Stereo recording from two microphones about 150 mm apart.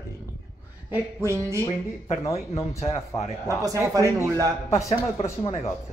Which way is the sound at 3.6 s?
25° right (ahead or behind).